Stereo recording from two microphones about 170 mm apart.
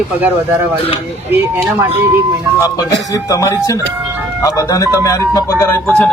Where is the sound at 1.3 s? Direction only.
15° right (ahead or behind).